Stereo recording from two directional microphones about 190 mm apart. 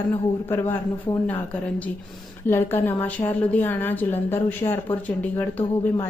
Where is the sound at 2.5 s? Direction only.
10° left (ahead or behind).